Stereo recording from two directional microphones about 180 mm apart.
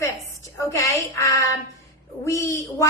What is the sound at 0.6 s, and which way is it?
Speech, 20° left (ahead or behind).